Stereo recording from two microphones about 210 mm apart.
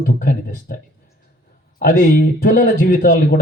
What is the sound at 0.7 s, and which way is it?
Speech, 45° left (ahead or behind).